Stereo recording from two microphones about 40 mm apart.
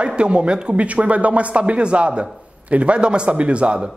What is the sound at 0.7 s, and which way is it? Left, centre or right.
A man's voice, right.